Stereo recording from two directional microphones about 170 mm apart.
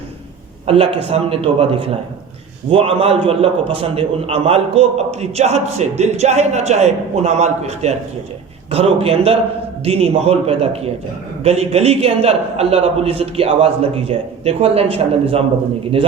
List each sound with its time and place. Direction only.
0.7 s a man's voice: 35° right (ahead or behind)